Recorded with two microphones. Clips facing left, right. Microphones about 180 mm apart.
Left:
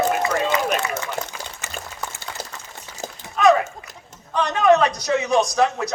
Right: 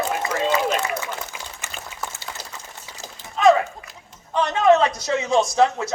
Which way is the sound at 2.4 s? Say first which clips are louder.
Left 5 dB; 50° left (ahead or behind).